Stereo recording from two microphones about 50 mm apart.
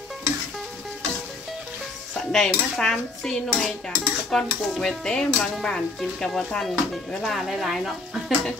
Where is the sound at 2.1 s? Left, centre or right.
Centre.